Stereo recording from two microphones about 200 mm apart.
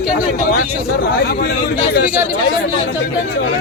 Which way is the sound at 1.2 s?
55° left (ahead or behind).